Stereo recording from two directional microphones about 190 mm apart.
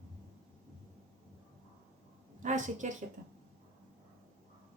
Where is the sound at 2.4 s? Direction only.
40° right (ahead or behind).